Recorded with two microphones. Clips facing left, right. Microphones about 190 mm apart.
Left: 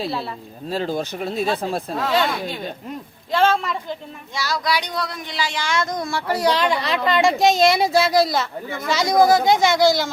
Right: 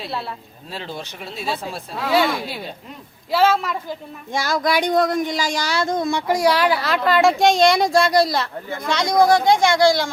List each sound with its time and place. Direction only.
0.7 s speech: 45° left (ahead or behind)
2.1 s speech: 5° right (ahead or behind)
4.3 s speech: 50° right (ahead or behind); by 10.1 s centre (ahead or behind)